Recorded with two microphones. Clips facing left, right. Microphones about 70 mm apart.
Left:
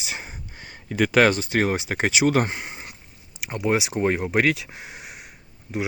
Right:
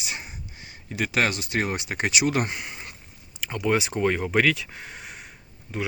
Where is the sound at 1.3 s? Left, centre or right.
Left.